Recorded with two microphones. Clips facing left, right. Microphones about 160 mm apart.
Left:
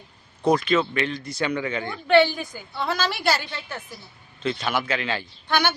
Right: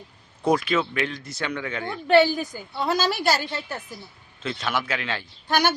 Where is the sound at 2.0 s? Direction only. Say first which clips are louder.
Even; 40° right (ahead or behind).